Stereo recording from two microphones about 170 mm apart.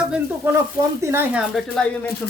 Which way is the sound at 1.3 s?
5° left (ahead or behind).